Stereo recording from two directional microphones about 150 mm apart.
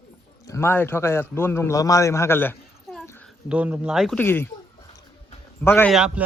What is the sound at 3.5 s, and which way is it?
Speech, 10° right (ahead or behind).